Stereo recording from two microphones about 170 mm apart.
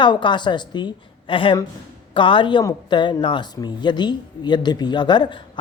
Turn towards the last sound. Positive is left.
turn(degrees=25)  # may be behind; listen again after turning